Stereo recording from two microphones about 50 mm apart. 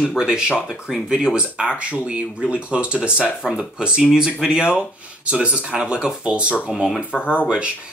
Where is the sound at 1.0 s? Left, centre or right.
Centre.